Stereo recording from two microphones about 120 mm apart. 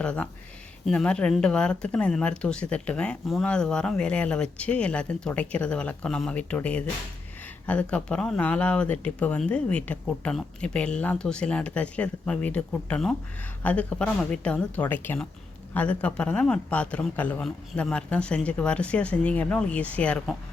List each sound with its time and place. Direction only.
0.0 s speech: 10° left (ahead or behind)